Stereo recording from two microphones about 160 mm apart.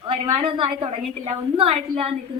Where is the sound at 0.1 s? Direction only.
35° right (ahead or behind).